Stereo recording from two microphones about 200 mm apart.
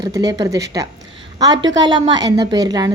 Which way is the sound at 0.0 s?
20° right (ahead or behind).